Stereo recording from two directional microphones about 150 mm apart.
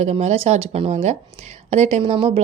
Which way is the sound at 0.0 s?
45° right (ahead or behind).